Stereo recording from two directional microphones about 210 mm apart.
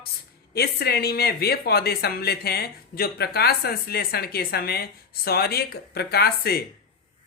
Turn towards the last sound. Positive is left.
turn(degrees=50)  # may be behind; listen again after turning